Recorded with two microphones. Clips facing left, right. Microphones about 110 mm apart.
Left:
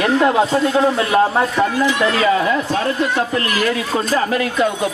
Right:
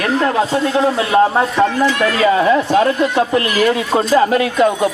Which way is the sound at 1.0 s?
25° right (ahead or behind).